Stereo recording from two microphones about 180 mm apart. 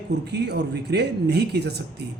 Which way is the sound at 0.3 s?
70° right (ahead or behind).